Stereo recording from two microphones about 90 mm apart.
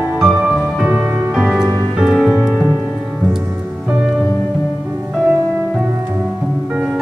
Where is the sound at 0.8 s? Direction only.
15° right (ahead or behind).